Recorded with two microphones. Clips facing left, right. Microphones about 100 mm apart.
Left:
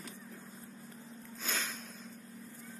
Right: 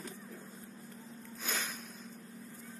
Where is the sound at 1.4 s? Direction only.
15° right (ahead or behind).